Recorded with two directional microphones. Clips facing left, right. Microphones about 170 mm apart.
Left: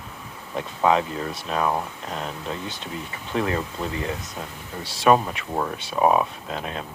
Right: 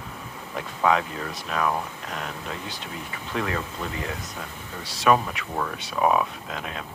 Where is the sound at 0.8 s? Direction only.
25° left (ahead or behind).